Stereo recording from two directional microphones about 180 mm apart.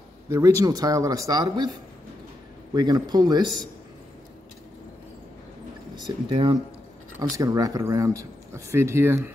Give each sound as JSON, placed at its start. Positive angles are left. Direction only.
{"t": 0.3, "sound": "a man's voice", "side_deg": -20}
{"t": 6.0, "sound": "a man's voice", "side_deg": -25}